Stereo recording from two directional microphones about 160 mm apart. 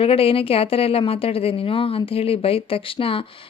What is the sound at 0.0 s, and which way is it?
Speech, 35° left (ahead or behind).